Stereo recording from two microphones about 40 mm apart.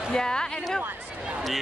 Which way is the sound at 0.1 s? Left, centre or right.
Centre.